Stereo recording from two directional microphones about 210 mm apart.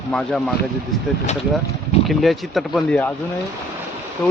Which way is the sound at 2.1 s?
Centre (ahead or behind).